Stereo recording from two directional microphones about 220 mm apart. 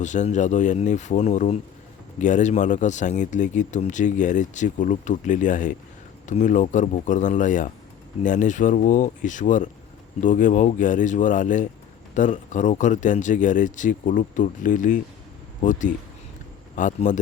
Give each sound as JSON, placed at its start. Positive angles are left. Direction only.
{"t": 0.0, "sound": "speech", "side_deg": 35}